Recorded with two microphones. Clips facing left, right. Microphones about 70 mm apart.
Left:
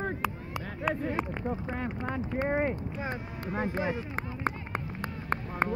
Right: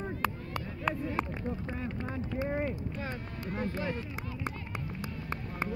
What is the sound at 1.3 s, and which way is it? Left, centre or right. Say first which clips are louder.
Speech: left 3 dB; left.